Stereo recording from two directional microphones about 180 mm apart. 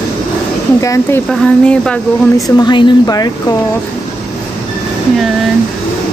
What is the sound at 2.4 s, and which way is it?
Speech, 25° left (ahead or behind).